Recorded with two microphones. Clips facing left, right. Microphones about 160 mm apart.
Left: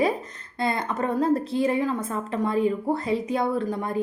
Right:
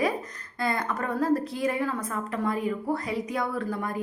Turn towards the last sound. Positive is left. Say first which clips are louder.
# left 4 dB
turn(degrees=25)  # may be behind; listen again after turning